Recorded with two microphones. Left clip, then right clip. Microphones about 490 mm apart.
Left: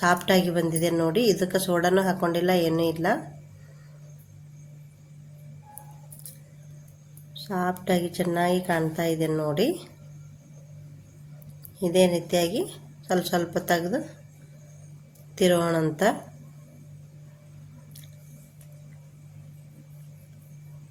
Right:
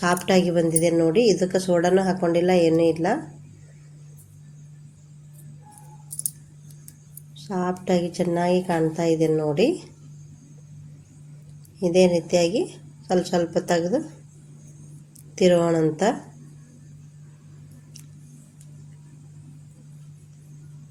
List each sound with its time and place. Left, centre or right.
0.3 s a woman's voice: left
7.4 s a woman's voice: left
11.8 s a woman's voice: left
15.4 s a woman's voice: left